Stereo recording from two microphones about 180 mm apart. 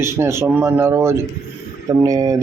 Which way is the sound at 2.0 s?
20° right (ahead or behind).